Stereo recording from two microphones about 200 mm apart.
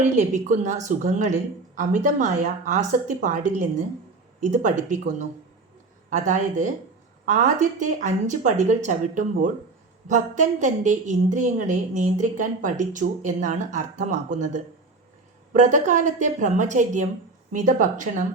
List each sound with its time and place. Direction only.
0.0 s speech: 35° right (ahead or behind)